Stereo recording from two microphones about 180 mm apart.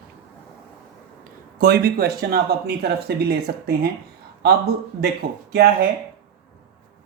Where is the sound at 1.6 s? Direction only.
60° right (ahead or behind).